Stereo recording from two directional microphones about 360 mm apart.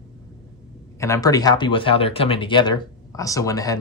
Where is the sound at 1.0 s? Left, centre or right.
Centre.